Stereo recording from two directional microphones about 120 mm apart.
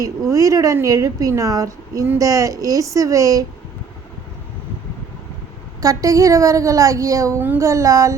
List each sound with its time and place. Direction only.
0.0 s a woman's voice: 30° right (ahead or behind)
5.8 s a woman's voice: 30° right (ahead or behind)